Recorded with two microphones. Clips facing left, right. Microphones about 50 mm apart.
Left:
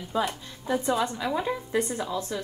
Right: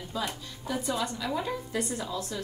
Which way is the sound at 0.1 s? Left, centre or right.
Left.